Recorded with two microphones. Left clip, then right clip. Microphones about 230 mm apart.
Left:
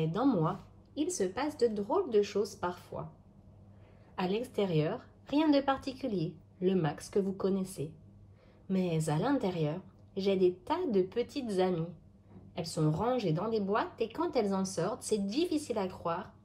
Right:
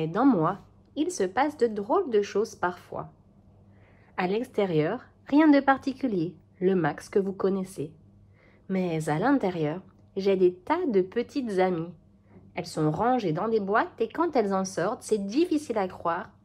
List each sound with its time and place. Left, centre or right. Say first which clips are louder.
0.1 s a woman's voice: right 10 dB; right
4.2 s a woman's voice: right 6 dB; right
8.6 s a woman's voice: right 5 dB; right